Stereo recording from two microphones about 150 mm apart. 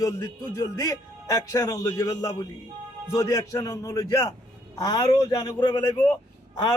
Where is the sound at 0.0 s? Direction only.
20° left (ahead or behind).